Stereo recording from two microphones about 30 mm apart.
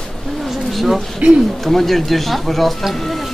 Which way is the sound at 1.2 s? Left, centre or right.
Right.